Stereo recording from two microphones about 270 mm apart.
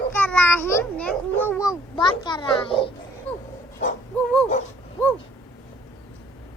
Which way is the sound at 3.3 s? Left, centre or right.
Centre.